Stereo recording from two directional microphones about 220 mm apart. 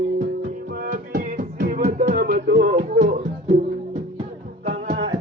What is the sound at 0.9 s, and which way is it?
Music, 40° right (ahead or behind).